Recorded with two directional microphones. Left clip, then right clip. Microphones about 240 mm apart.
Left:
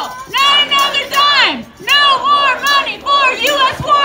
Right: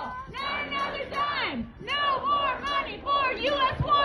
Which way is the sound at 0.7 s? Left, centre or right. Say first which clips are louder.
Left 17 dB; left.